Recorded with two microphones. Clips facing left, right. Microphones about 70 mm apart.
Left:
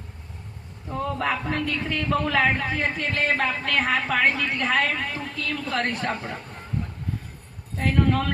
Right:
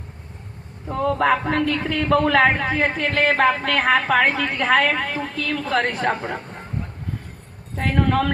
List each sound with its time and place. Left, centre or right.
0.9 s a woman's voice: right
7.8 s a woman's voice: right